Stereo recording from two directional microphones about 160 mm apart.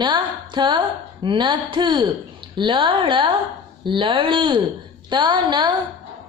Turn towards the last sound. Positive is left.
turn(degrees=-30)  # may be behind; listen again after turning